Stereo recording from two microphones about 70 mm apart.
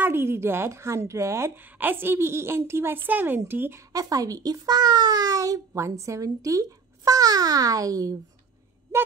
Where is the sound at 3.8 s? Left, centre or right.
Right.